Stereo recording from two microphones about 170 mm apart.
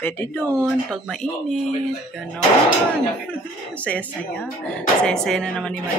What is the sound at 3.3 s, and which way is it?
Speech, 10° left (ahead or behind).